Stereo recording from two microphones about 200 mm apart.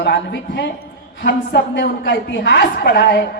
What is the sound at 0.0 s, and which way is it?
A woman's voice, 55° left (ahead or behind).